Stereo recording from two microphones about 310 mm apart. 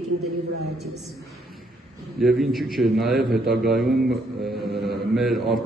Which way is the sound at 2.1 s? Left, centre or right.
Centre.